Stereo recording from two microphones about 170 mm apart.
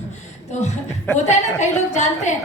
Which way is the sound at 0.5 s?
40° left (ahead or behind).